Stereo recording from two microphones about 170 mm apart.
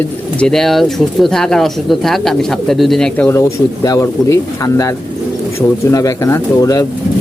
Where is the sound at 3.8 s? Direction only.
20° left (ahead or behind).